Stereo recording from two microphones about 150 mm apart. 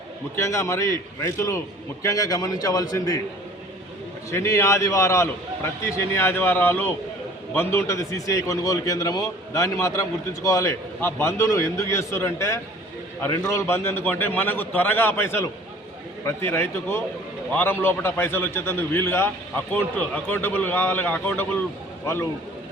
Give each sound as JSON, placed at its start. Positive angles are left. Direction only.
{"t": 0.3, "sound": "a man's voice", "side_deg": 20}
{"t": 4.3, "sound": "a man's voice", "side_deg": 20}